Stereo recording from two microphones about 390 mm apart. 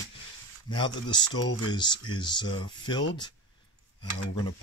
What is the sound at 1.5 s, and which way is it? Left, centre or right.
Speech, left.